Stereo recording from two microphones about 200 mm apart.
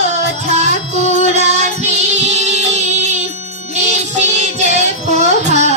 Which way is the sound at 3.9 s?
35° right (ahead or behind).